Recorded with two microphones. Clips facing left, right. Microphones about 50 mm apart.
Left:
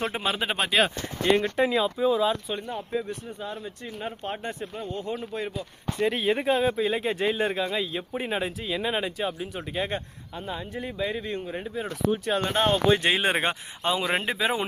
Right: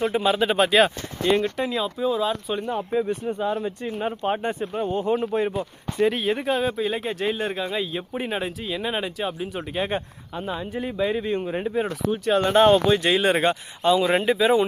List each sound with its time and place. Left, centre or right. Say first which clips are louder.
0.3 s speech: right 7 dB; centre
1.2 s speech: right 1 dB; centre
1.8 s speech: left 1 dB; centre
2.9 s speech: right 6 dB; right
3.2 s speech: right 10 dB; right
3.8 s speech: right 7 dB; right
6.0 s speech: right 3 dB; centre
9.2 s speech: right 2 dB; centre
11.4 s speech: right 7 dB; right
12.4 s speech: right 8 dB; centre
12.9 s speech: right 3 dB; left